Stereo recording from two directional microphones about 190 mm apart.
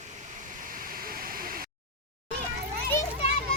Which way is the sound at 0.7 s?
50° right (ahead or behind).